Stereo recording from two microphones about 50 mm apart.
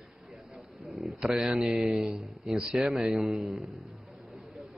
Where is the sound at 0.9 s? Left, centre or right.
Centre.